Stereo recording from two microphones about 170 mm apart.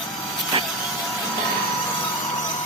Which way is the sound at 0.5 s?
30° right (ahead or behind).